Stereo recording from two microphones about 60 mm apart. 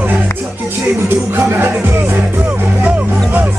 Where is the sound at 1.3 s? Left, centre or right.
Right.